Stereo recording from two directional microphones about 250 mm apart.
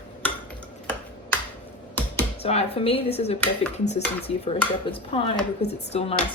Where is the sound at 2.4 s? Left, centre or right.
Left.